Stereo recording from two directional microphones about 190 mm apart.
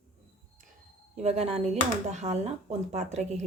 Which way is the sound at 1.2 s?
35° right (ahead or behind).